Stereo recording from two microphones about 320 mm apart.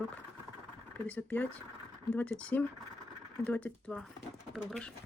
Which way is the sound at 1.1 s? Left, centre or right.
Centre.